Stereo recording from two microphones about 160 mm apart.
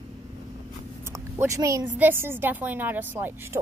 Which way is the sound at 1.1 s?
20° right (ahead or behind).